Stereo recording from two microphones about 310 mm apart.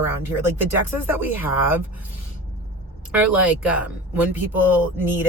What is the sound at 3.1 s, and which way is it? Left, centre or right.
Speech, centre.